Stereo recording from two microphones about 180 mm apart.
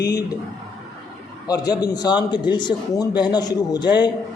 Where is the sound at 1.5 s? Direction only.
20° left (ahead or behind).